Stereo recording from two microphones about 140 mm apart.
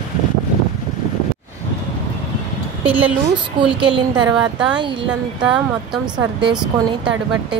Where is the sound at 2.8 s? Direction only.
10° right (ahead or behind).